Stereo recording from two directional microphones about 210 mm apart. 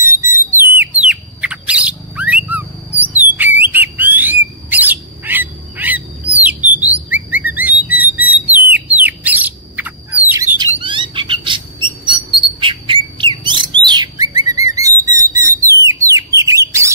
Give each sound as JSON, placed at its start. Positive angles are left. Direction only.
{"t": 0.0, "sound": "bird", "side_deg": -10}
{"t": 8.0, "sound": "a sound", "side_deg": -5}
{"t": 8.7, "sound": "bird", "side_deg": -10}
{"t": 10.8, "sound": "bird", "side_deg": -25}
{"t": 14.4, "sound": "a sound", "side_deg": -15}
{"t": 15.8, "sound": "bird", "side_deg": -15}